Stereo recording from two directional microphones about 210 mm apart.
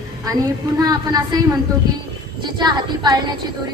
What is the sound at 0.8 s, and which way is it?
Speech, 20° right (ahead or behind).